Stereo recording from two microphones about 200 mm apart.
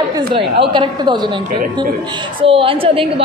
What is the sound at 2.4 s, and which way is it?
Speech, 25° right (ahead or behind).